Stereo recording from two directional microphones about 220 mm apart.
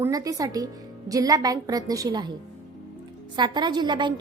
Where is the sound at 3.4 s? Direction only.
20° right (ahead or behind).